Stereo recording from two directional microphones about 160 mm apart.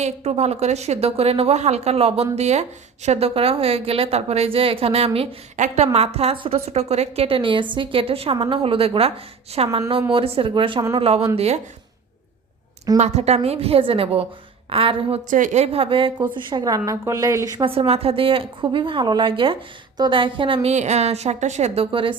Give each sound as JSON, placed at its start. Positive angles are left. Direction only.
{"t": 0.0, "sound": "a woman's voice", "side_deg": -40}
{"t": 13.0, "sound": "a woman's voice", "side_deg": -45}
{"t": 15.3, "sound": "a woman's voice", "side_deg": -50}
{"t": 17.7, "sound": "a woman's voice", "side_deg": -35}